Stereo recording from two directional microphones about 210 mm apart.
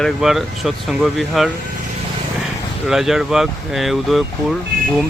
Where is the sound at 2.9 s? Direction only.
Centre (ahead or behind).